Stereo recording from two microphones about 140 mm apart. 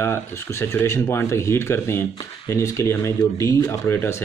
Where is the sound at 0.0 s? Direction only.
20° left (ahead or behind).